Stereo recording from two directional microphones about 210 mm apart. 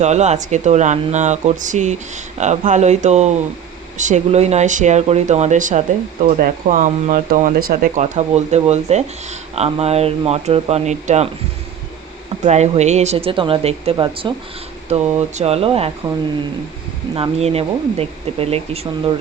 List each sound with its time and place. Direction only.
0.0 s speech: 35° right (ahead or behind)
12.5 s speech: 30° right (ahead or behind)
17.2 s speech: 30° right (ahead or behind)